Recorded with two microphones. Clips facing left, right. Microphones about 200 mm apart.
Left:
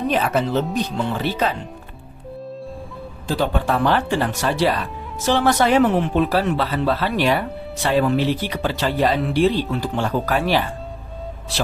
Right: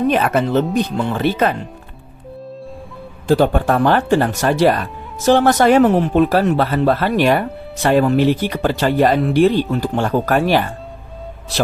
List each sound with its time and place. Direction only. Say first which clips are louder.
0.1 s speech: right 4 dB; 60° right (ahead or behind)
3.2 s speech: right 7 dB; 50° right (ahead or behind)